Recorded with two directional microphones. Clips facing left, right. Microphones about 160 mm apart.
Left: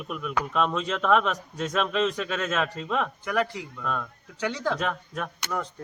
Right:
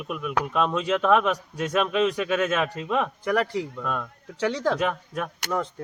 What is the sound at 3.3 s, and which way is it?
Speech, 35° right (ahead or behind).